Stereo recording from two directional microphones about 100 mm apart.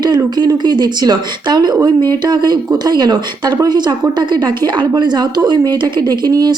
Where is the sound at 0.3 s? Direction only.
45° right (ahead or behind).